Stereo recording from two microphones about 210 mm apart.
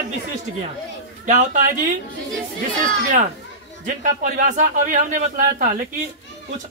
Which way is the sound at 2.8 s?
40° right (ahead or behind).